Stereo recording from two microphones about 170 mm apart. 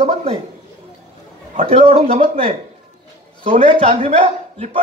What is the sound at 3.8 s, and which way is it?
Speech, 45° right (ahead or behind).